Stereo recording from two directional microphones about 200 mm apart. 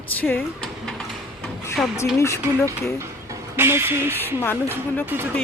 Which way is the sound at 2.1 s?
15° left (ahead or behind).